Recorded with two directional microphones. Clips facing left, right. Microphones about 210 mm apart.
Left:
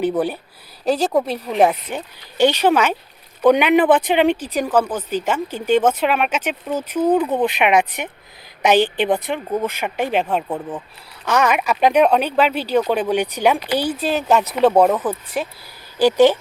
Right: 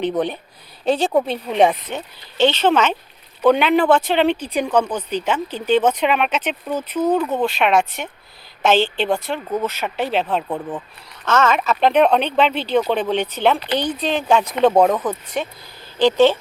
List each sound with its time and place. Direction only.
0.9 s speech: centre (ahead or behind)